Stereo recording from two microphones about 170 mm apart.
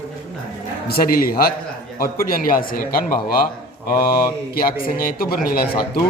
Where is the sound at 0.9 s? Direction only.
60° left (ahead or behind).